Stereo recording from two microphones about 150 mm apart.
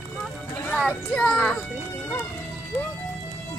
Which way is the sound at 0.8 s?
5° left (ahead or behind).